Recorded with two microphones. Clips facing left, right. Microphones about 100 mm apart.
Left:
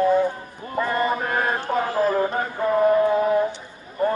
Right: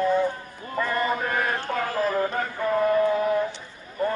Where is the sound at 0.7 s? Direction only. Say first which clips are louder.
Left 3 dB; 20° left (ahead or behind).